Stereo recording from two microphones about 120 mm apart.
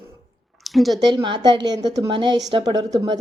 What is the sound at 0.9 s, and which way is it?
A woman's voice, 40° right (ahead or behind).